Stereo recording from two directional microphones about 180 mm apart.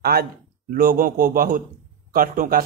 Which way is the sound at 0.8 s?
55° right (ahead or behind).